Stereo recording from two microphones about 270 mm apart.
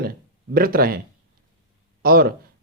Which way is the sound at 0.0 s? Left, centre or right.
Right.